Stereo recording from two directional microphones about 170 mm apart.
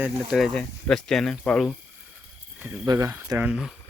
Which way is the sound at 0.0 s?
Centre (ahead or behind).